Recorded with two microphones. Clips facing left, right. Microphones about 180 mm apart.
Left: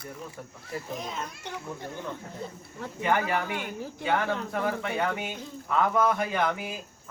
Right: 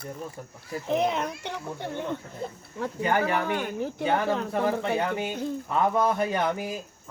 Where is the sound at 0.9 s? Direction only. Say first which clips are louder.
Right 14 dB; 65° right (ahead or behind).